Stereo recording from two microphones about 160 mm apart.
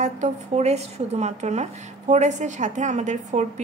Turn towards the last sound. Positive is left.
turn(degrees=-45)  # may be behind; listen again after turning